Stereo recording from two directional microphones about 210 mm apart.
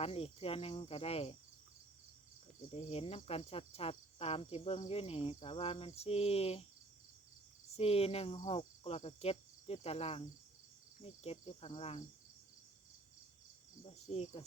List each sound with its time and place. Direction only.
0.0 s cricket: 30° left (ahead or behind)
2.7 s cricket: 30° left (ahead or behind)
7.8 s cricket: 30° left (ahead or behind)
13.8 s cricket: 30° left (ahead or behind)